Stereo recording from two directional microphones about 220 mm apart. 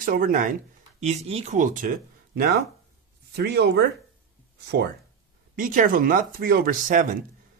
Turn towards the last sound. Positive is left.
turn(degrees=-40)  # may be behind; listen again after turning